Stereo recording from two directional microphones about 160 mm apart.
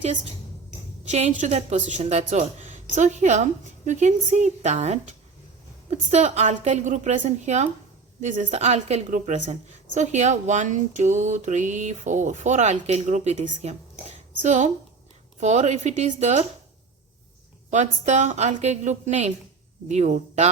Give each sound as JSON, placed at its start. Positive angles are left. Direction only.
{"t": 1.1, "sound": "a woman's voice", "side_deg": -45}
{"t": 17.7, "sound": "a woman's voice", "side_deg": -45}